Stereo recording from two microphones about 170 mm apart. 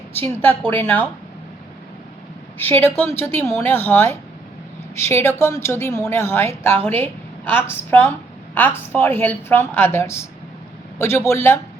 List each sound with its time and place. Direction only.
0.2 s a woman's voice: 15° left (ahead or behind)
2.6 s a woman's voice: 10° left (ahead or behind)